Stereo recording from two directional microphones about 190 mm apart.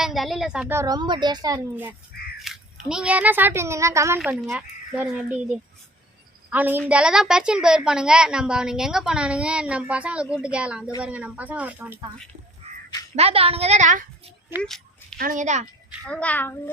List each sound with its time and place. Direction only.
0.0 s a woman's voice: centre (ahead or behind); by 1.6 s 20° right (ahead or behind)
1.7 s a woman's voice: 10° right (ahead or behind)
4.2 s a woman's voice: 5° right (ahead or behind)
6.5 s a woman's voice: 10° right (ahead or behind)
12.6 s crow: 35° right (ahead or behind)
13.1 s a woman's voice: 30° right (ahead or behind)
14.6 s a sound: 5° left (ahead or behind)
15.2 s a woman's voice: 45° right (ahead or behind)
16.0 s a child's voice: 5° left (ahead or behind)